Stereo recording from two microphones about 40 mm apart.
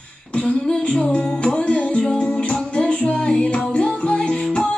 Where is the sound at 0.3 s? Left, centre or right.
Left.